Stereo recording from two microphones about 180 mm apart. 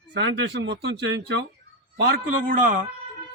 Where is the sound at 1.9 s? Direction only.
55° right (ahead or behind).